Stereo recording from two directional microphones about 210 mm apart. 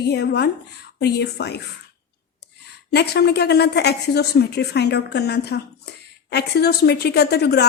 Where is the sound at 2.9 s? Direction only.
50° left (ahead or behind).